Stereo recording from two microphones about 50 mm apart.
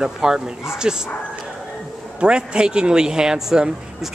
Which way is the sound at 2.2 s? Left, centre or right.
Centre.